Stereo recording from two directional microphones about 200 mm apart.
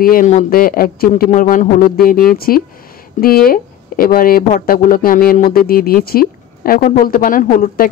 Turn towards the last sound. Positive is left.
turn(degrees=45)  # may be behind; listen again after turning